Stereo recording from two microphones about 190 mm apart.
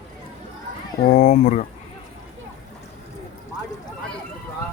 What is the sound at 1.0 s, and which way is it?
Speech, 40° left (ahead or behind).